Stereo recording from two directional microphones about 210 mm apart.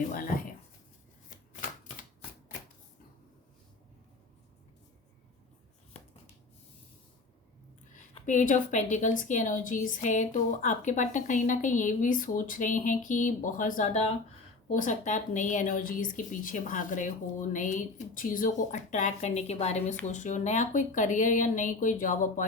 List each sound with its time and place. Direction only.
0.1 s a woman's voice: 40° left (ahead or behind)
8.1 s a woman's voice: 35° left (ahead or behind)